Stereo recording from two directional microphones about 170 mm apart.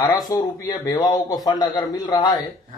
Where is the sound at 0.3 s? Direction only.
25° left (ahead or behind).